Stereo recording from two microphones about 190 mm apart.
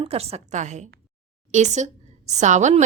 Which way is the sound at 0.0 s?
30° right (ahead or behind).